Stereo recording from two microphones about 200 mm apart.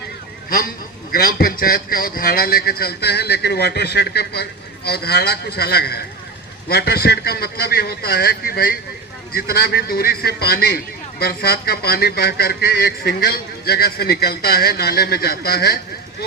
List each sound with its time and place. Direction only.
1.1 s speech: 50° left (ahead or behind)